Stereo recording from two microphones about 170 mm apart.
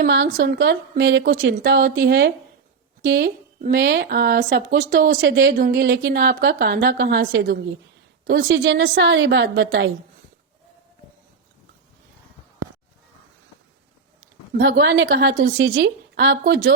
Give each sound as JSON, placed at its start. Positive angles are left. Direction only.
{"t": 0.0, "sound": "a woman's voice", "side_deg": -65}
{"t": 1.5, "sound": "a woman's voice", "side_deg": -60}
{"t": 3.6, "sound": "speech", "side_deg": -60}
{"t": 8.3, "sound": "a woman's voice", "side_deg": -80}
{"t": 14.6, "sound": "a woman's voice", "side_deg": -75}
{"t": 15.5, "sound": "a woman's voice", "side_deg": -90}